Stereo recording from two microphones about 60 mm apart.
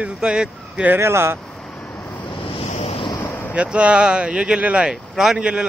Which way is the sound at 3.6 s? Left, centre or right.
Centre.